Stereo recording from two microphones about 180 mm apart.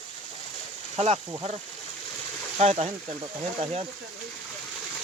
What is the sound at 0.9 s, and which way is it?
Speech, 35° right (ahead or behind).